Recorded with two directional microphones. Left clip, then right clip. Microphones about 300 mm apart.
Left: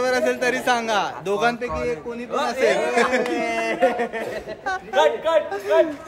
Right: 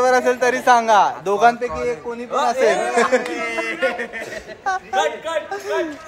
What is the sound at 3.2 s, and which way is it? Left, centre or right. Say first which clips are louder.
Speech: left 1 dB; left.